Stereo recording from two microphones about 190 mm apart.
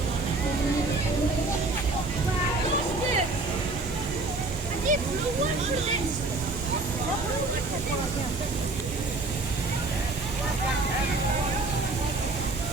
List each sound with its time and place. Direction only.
4.9 s waterfall: 45° right (ahead or behind)